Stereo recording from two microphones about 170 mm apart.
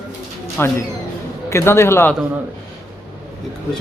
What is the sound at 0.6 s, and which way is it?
A man's voice, 15° left (ahead or behind).